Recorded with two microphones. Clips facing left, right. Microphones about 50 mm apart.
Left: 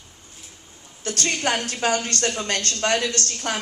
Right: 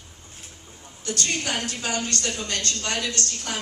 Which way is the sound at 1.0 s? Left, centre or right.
Left.